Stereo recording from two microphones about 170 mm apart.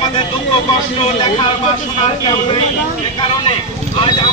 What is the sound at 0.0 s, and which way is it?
Speech, 30° left (ahead or behind).